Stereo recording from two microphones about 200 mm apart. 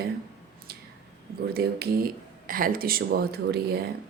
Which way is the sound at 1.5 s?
50° right (ahead or behind).